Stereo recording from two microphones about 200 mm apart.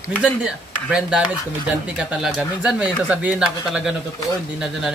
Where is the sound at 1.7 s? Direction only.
5° right (ahead or behind).